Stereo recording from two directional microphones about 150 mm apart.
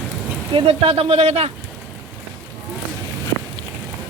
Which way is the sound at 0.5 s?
40° right (ahead or behind).